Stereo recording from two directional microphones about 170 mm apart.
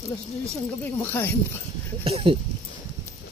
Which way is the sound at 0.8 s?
10° left (ahead or behind).